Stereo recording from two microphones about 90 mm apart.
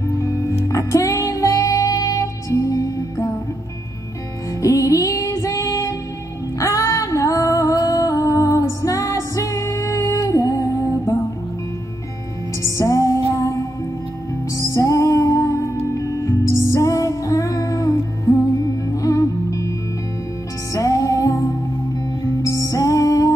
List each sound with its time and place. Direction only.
0.5 s music: 35° left (ahead or behind)
4.6 s music: 40° left (ahead or behind)
12.6 s music: 35° left (ahead or behind)
18.9 s music: 40° left (ahead or behind)
20.7 s music: 40° left (ahead or behind)
22.7 s music: 40° left (ahead or behind)